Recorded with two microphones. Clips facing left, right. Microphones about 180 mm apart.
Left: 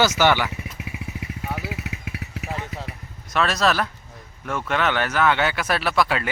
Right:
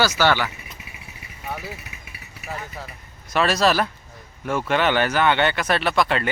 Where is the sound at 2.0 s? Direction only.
90° left.